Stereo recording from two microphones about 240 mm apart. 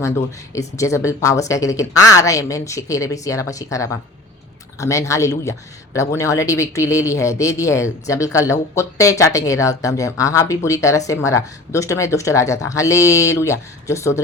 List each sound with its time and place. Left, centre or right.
0.8 s speech: centre